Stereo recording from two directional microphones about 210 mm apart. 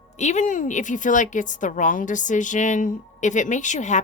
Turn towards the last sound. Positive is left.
turn(degrees=35)  # may be behind; listen again after turning